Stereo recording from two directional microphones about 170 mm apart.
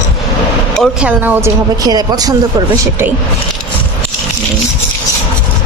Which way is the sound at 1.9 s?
25° right (ahead or behind).